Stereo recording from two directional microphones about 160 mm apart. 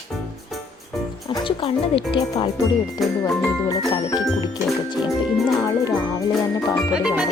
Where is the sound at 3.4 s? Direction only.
20° left (ahead or behind).